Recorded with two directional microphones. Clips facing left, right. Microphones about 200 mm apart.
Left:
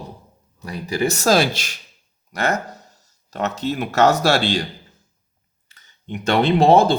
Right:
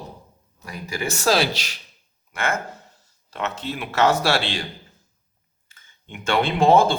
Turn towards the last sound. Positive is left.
turn(degrees=35)  # may be behind; listen again after turning